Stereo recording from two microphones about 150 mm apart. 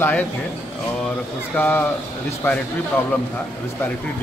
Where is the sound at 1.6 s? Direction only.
15° left (ahead or behind).